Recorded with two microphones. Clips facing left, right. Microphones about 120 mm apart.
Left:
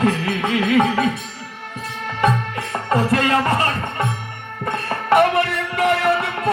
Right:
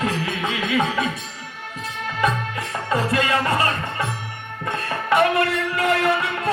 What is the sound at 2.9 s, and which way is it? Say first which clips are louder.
Music: left 3 dB; 40° left (ahead or behind).